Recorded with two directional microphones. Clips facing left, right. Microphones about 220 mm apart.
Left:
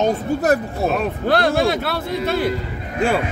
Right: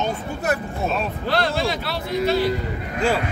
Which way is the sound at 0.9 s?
55° left (ahead or behind).